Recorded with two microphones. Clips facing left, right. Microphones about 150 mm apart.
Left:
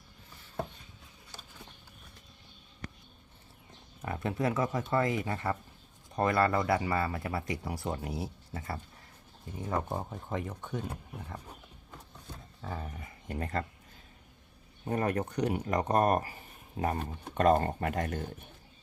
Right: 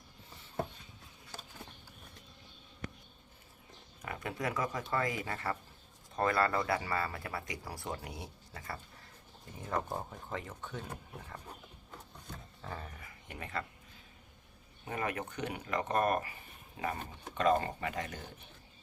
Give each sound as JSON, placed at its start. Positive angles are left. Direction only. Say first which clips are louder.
{"t": 4.0, "sound": "speech", "louder": "left 6 dB", "side_deg": 30}
{"t": 9.6, "sound": "speech", "louder": "left 3 dB", "side_deg": 10}
{"t": 12.3, "sound": "roaring cats", "louder": "left 4 dB", "side_deg": 10}
{"t": 13.0, "sound": "speech", "louder": "left 8 dB", "side_deg": 40}
{"t": 14.8, "sound": "speech", "louder": "left 6 dB", "side_deg": 40}